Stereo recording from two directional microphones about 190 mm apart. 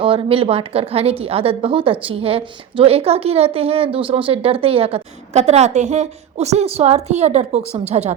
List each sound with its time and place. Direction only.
0.0 s a woman's voice: 30° right (ahead or behind)